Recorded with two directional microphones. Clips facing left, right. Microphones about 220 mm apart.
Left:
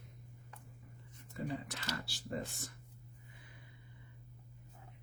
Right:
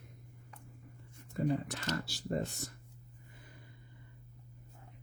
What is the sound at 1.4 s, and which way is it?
Speech, 45° right (ahead or behind).